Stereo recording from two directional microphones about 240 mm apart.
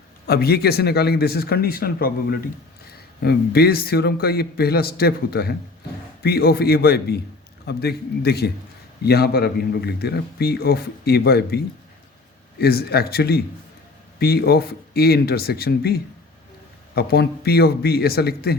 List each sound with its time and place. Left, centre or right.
0.3 s a man's voice: left